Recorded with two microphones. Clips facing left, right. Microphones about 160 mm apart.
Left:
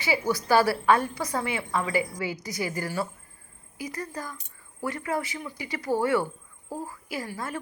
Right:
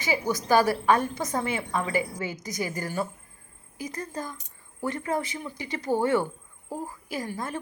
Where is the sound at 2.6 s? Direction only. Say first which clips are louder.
Left 1 dB; 45° right (ahead or behind).